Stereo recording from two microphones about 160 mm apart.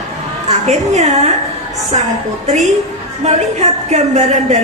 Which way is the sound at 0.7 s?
45° right (ahead or behind).